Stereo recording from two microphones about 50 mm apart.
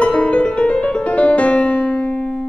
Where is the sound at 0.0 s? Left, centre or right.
Left.